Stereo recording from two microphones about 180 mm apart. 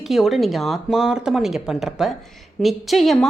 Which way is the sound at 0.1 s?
Centre (ahead or behind).